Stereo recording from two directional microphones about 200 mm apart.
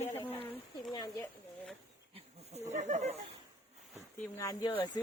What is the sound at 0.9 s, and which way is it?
Speech, 20° left (ahead or behind).